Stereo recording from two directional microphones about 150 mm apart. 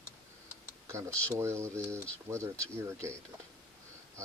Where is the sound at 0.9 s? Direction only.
20° right (ahead or behind).